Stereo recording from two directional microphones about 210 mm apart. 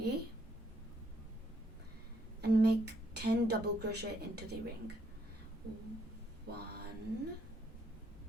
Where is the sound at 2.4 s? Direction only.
50° right (ahead or behind).